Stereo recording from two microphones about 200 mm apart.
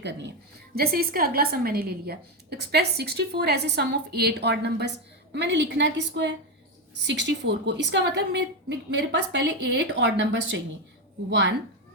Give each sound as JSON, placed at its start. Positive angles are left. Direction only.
{"t": 0.0, "sound": "speech", "side_deg": -60}
{"t": 0.8, "sound": "a woman's voice", "side_deg": -50}